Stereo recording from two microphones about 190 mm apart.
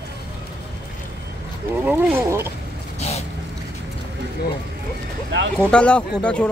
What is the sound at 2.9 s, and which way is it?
Vehicle, 35° left (ahead or behind).